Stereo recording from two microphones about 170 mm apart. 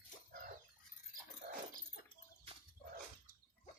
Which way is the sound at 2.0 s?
65° left (ahead or behind).